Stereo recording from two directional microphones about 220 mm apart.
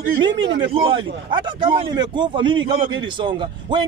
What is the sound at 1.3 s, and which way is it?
A man's voice, 20° right (ahead or behind).